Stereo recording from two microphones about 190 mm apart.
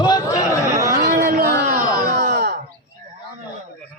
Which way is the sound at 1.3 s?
50° right (ahead or behind).